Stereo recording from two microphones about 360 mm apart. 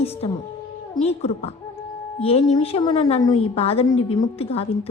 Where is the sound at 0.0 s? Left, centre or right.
Centre.